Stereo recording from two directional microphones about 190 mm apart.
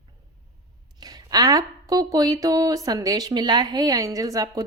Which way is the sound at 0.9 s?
20° right (ahead or behind).